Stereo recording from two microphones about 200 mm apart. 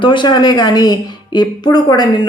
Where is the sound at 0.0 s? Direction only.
25° left (ahead or behind).